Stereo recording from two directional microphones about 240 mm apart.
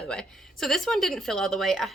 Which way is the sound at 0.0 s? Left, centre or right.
Centre.